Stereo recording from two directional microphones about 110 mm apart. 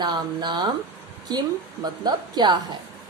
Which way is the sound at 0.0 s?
40° right (ahead or behind).